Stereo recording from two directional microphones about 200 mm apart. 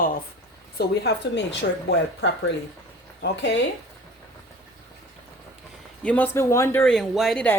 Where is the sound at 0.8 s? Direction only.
60° left (ahead or behind).